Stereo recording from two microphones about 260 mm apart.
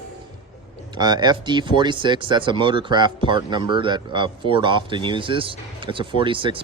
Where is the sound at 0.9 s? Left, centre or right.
Centre.